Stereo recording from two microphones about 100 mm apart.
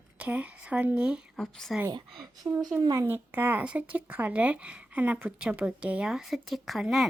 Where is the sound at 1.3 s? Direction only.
5° left (ahead or behind).